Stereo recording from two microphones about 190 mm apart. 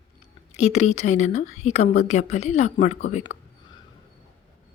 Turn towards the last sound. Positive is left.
turn(degrees=35)  # may be behind; listen again after turning